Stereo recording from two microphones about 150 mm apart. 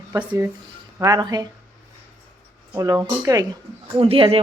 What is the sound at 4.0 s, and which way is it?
Speech, 40° right (ahead or behind).